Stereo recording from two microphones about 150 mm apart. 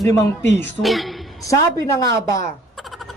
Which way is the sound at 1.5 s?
20° left (ahead or behind).